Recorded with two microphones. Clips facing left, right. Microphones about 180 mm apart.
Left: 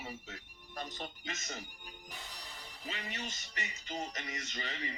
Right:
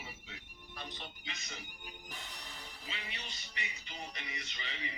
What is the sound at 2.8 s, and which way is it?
Music, 45° left (ahead or behind).